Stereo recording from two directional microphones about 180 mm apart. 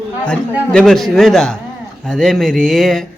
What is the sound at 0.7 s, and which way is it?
A man's voice, 5° left (ahead or behind).